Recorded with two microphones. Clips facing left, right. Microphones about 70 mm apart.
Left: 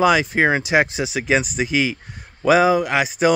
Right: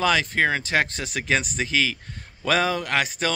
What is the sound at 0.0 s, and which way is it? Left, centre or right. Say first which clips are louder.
Speech: left 5 dB; centre.